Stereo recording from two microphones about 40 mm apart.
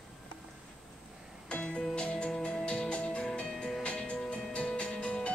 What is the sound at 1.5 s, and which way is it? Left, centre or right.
Music, left.